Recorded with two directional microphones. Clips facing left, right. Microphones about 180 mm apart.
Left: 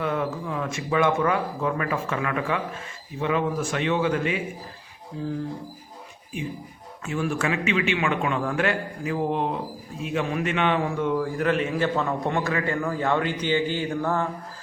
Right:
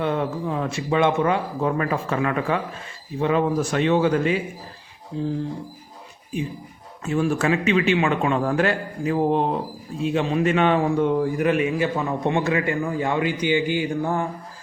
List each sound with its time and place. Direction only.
0.0 s speech: 30° right (ahead or behind)
7.0 s a man's voice: 35° right (ahead or behind)
11.3 s a man's voice: 15° right (ahead or behind)
12.2 s a man's voice: 25° right (ahead or behind)